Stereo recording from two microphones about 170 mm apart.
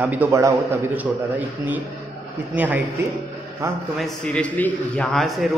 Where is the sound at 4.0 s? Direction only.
5° left (ahead or behind).